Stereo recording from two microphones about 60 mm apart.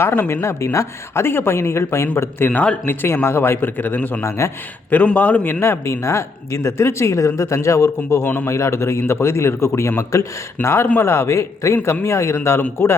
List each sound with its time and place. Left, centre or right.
0.4 s speech: left
1.2 s speech: left
2.5 s a man's voice: left
2.8 s speech: left
4.2 s speech: left
5.0 s a man's voice: left
5.6 s speech: left
8.2 s speech: left
8.4 s speech: left
12.8 s speech: left